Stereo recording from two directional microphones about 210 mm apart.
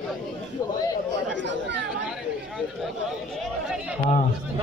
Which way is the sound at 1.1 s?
55° right (ahead or behind).